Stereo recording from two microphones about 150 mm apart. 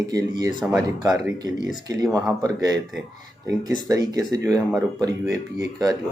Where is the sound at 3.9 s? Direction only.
25° right (ahead or behind).